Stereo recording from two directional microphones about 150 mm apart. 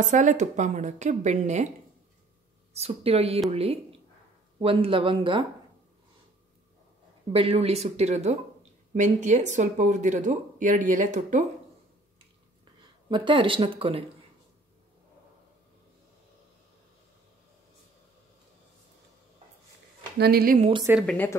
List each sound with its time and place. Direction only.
0.0 s a woman's voice: 55° right (ahead or behind)
2.7 s speech: 45° right (ahead or behind)
7.3 s a woman's voice: 40° right (ahead or behind)
12.8 s speech: 30° right (ahead or behind)
20.2 s speech: 90° right
21.0 s a woman's voice: 5° left (ahead or behind)